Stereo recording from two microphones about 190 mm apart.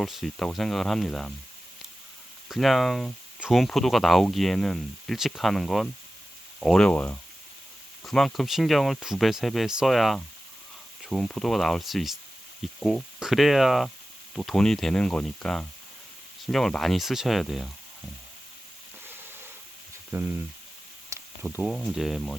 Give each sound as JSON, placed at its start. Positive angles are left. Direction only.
{"t": 0.0, "sound": "speech", "side_deg": 0}
{"t": 2.5, "sound": "speech", "side_deg": 0}
{"t": 19.0, "sound": "a sound", "side_deg": -10}
{"t": 20.1, "sound": "speech", "side_deg": -10}
{"t": 21.1, "sound": "a sound", "side_deg": -15}
{"t": 21.4, "sound": "speech", "side_deg": -5}